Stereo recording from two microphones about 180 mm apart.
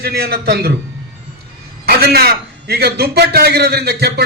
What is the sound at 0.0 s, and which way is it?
Speech, 60° right (ahead or behind).